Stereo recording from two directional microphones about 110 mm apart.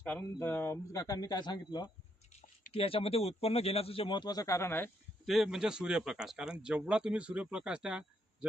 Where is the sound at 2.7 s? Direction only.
60° left (ahead or behind).